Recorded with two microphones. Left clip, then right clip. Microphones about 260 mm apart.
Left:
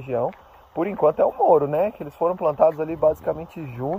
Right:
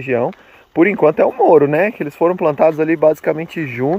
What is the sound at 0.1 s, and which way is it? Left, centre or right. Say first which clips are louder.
Speech: right 5 dB; right.